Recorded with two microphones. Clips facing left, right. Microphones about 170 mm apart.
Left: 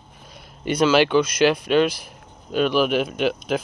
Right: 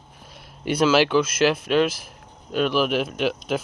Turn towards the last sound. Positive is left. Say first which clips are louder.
# left 2 dB
turn(degrees=0)  # may be behind; listen again after turning